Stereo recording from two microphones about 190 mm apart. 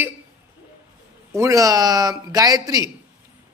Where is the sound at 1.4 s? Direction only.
15° right (ahead or behind).